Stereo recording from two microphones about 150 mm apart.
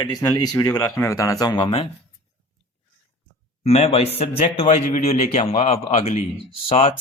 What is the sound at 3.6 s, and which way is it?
A man's voice, 45° left (ahead or behind).